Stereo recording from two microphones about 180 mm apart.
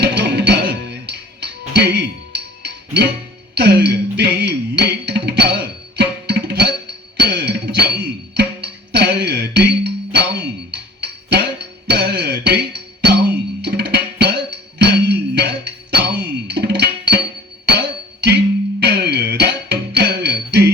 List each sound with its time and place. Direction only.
0.0 s music: 70° right (ahead or behind)